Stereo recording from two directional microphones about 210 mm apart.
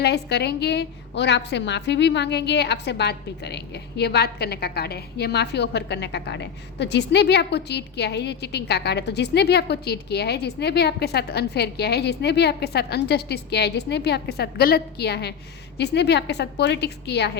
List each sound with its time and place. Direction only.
0.0 s a woman's voice: 50° left (ahead or behind)